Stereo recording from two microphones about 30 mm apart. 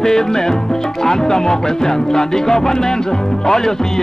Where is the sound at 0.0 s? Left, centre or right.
Centre.